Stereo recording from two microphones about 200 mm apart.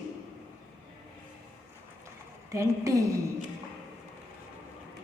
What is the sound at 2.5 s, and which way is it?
Speech, 15° right (ahead or behind).